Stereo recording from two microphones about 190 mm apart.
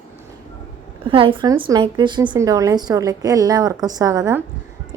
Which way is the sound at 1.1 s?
25° right (ahead or behind).